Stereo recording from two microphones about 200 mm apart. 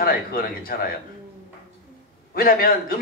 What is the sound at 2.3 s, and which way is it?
Speech, 45° left (ahead or behind).